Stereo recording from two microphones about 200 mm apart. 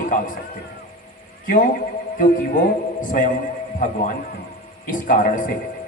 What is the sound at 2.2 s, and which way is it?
A man's voice, 40° left (ahead or behind).